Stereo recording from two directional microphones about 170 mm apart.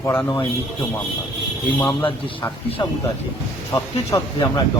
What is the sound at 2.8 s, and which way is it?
A man's voice, 25° left (ahead or behind).